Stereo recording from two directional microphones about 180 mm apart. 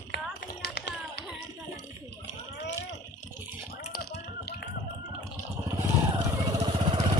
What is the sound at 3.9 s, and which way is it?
Tap, 60° left (ahead or behind).